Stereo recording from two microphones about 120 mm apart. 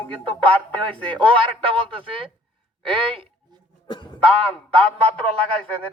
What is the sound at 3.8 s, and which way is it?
Music, 40° left (ahead or behind).